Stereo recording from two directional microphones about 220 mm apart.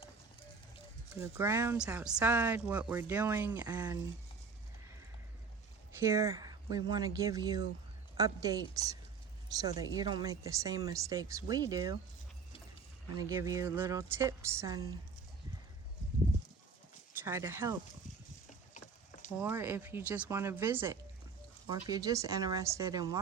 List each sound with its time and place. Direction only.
1.2 s a woman's voice: 10° right (ahead or behind)
6.0 s a woman's voice: 15° right (ahead or behind)
13.1 s a woman's voice: 15° right (ahead or behind)
17.2 s a woman's voice: 10° right (ahead or behind)
19.4 s a woman's voice: 10° right (ahead or behind)